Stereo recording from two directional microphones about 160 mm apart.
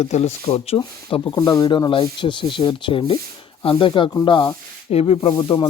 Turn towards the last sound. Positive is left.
turn(degrees=30)  # may be behind; listen again after turning